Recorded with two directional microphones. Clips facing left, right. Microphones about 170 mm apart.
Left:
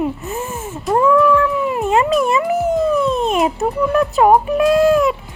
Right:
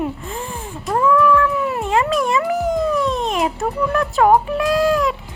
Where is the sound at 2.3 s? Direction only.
25° left (ahead or behind).